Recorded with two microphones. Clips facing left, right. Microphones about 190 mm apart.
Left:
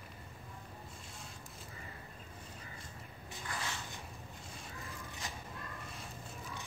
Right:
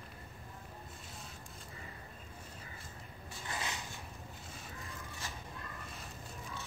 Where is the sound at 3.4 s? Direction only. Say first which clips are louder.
Right 1 dB; 20° right (ahead or behind).